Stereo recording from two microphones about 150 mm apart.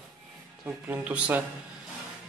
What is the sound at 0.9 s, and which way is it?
Speech, 10° right (ahead or behind).